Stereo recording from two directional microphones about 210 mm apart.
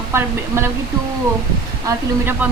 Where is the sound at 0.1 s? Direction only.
10° right (ahead or behind).